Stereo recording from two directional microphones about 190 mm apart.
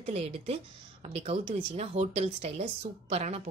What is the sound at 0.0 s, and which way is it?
A woman's voice, 30° right (ahead or behind).